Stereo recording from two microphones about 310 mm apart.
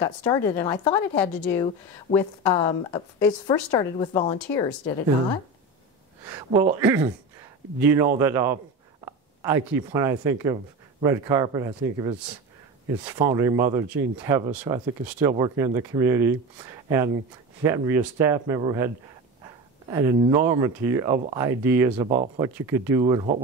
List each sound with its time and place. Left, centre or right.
0.0 s a woman's voice: centre
2.1 s speech: left
2.5 s a woman's voice: centre
6.2 s speech: centre
13.3 s speech: centre
19.9 s speech: centre